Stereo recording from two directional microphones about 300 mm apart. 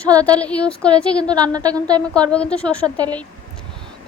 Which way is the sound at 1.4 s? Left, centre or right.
Centre.